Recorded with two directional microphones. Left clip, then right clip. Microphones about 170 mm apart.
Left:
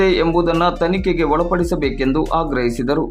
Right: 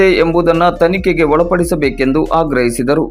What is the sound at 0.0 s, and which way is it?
Speech, 20° right (ahead or behind).